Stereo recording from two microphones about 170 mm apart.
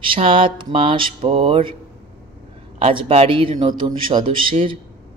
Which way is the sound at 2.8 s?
35° right (ahead or behind).